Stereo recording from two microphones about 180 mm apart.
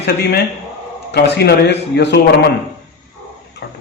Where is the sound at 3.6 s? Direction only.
65° left (ahead or behind).